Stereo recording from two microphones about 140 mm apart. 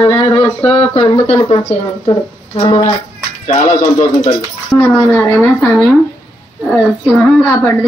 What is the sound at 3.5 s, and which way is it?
Speech, 50° left (ahead or behind).